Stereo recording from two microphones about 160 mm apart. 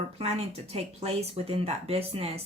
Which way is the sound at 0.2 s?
40° right (ahead or behind).